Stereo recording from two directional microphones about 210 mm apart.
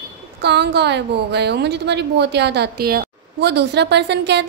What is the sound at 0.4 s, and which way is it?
A woman's voice, 55° right (ahead or behind).